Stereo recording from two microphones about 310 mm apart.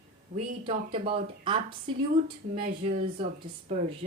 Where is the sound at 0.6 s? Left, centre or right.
Centre.